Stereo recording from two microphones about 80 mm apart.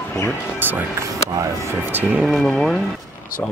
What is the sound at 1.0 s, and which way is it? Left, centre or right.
Speech, right.